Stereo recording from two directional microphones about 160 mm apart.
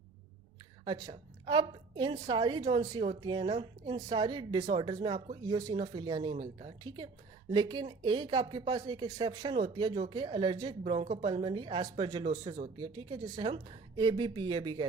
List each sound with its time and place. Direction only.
0.9 s a woman's voice: 25° right (ahead or behind)